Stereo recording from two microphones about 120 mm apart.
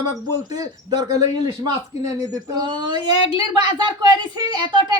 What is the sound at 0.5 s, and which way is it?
Speech, 35° right (ahead or behind).